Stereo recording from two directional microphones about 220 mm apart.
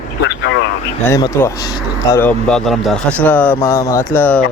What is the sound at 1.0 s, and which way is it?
Speech, 15° left (ahead or behind).